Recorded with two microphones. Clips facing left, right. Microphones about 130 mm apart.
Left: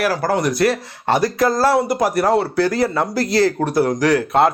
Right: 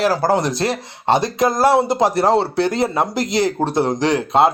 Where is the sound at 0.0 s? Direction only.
25° right (ahead or behind).